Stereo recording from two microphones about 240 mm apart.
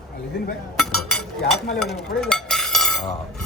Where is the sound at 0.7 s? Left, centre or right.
Centre.